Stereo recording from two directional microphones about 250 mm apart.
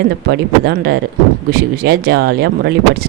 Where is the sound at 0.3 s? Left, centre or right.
Right.